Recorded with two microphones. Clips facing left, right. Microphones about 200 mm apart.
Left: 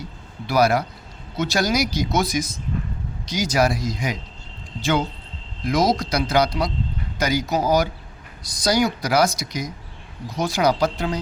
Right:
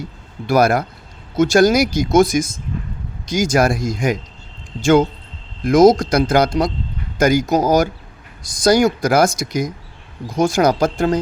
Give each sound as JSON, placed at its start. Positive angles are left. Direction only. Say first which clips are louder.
{"t": 0.4, "sound": "speech", "louder": "right 4 dB", "side_deg": -50}